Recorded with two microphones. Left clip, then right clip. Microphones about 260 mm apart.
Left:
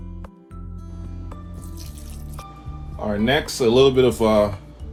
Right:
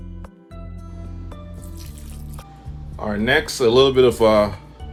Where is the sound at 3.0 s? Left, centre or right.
Right.